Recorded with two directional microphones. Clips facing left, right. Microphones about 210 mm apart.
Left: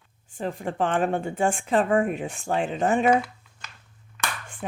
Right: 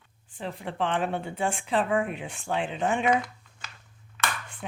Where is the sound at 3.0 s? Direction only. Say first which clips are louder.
Left 4 dB; 5° left (ahead or behind).